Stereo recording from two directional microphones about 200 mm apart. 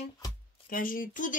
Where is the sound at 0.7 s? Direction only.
45° left (ahead or behind).